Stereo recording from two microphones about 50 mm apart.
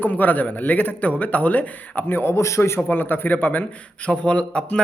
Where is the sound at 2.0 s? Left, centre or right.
Left.